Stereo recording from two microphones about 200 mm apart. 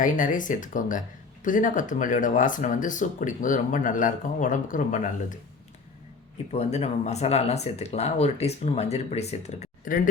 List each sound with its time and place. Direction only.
0.0 s speech: 40° left (ahead or behind)
6.5 s speech: 35° left (ahead or behind)